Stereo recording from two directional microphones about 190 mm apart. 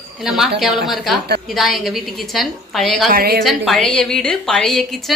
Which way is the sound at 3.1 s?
50° right (ahead or behind).